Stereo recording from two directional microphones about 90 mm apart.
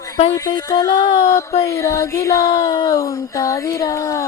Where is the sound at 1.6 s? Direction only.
35° left (ahead or behind).